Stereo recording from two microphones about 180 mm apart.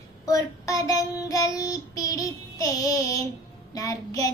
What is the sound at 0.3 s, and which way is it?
Child singing, 20° left (ahead or behind).